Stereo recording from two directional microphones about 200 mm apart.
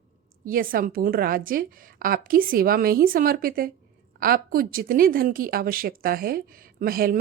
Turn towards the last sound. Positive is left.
turn(degrees=-45)  # may be behind; listen again after turning